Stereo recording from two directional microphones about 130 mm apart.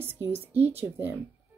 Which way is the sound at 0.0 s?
15° right (ahead or behind).